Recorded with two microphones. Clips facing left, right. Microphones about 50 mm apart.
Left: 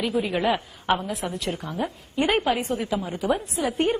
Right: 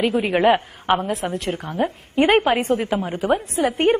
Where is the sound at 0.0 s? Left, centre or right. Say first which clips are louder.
Right 6 dB; right.